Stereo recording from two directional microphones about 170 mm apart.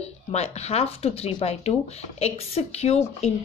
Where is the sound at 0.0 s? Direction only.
40° left (ahead or behind).